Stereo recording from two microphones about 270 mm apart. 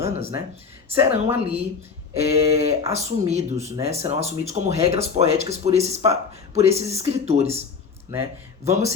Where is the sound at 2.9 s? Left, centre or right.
Right.